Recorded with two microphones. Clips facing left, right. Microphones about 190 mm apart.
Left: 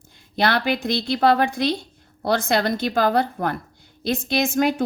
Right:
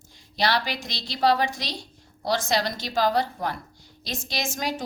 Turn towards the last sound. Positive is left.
turn(degrees=55)  # may be behind; listen again after turning